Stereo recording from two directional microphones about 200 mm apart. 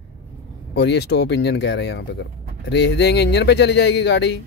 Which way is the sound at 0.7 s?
55° left (ahead or behind).